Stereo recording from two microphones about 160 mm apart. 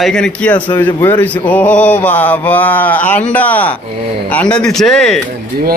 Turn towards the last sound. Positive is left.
turn(degrees=0)  # may be behind; listen again after turning